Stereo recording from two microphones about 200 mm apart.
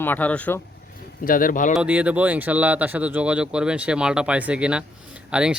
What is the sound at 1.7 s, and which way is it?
A man's voice, 5° right (ahead or behind).